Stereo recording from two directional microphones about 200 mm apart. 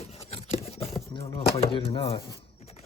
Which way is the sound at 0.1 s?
30° left (ahead or behind).